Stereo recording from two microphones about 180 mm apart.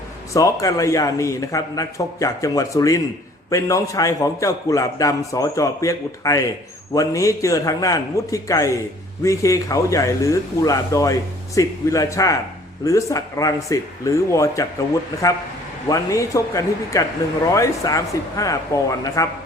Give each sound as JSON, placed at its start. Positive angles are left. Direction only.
{"t": 0.3, "sound": "a man's voice", "side_deg": 15}
{"t": 15.9, "sound": "a man's voice", "side_deg": 15}